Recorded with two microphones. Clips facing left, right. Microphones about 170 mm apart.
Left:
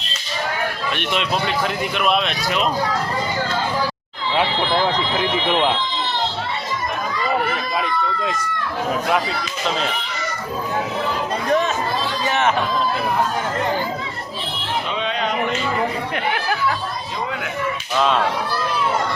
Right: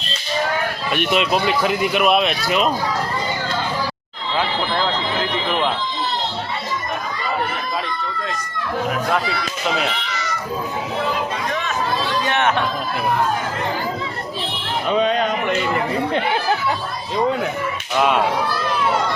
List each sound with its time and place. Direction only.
0.9 s speech: 5° right (ahead or behind)
9.6 s speech: 5° right (ahead or behind)
12.3 s speech: centre (ahead or behind)
14.8 s a man's voice: 45° right (ahead or behind)
16.1 s chatter: 25° right (ahead or behind)